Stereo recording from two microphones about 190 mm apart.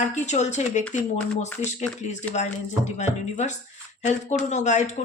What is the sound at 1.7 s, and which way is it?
Speech, 40° left (ahead or behind).